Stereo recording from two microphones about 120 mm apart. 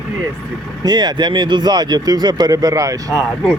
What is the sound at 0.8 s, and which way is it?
Speech, 35° right (ahead or behind).